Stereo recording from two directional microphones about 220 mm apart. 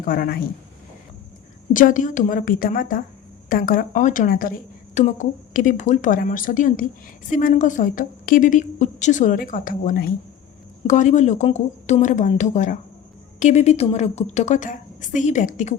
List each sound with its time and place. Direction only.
0.1 s a woman's voice: 40° left (ahead or behind)
1.7 s a woman's voice: 35° left (ahead or behind)